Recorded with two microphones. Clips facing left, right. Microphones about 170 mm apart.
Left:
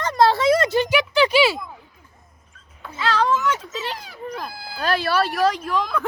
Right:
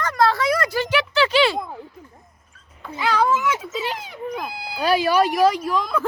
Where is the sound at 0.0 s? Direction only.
25° left (ahead or behind).